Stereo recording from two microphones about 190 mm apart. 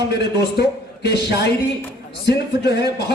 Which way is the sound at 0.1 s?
60° left (ahead or behind).